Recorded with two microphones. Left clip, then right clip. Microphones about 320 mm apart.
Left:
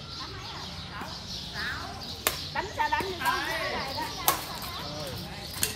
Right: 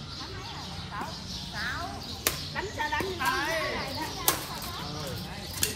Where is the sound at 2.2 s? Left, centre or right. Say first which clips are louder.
Left 1 dB; centre.